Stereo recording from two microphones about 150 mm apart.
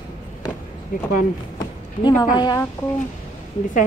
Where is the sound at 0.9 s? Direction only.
65° left (ahead or behind).